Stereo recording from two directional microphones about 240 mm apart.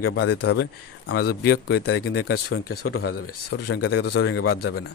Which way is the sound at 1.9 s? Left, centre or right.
Left.